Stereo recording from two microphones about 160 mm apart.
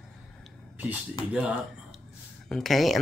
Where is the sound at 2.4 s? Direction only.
Centre (ahead or behind).